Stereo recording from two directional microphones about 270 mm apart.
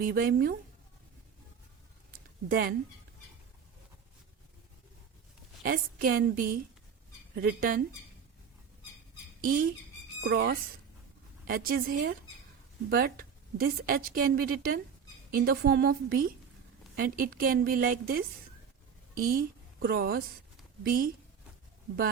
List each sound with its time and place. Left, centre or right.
0.0 s a woman's voice: right
2.5 s a woman's voice: right
5.6 s a woman's voice: right
9.4 s a woman's voice: right